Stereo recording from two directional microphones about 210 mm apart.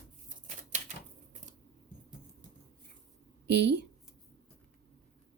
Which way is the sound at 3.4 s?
55° right (ahead or behind).